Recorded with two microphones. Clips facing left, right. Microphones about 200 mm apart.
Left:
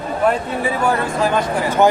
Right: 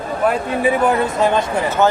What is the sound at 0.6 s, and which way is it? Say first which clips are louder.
Speech: right 4 dB; 20° right (ahead or behind).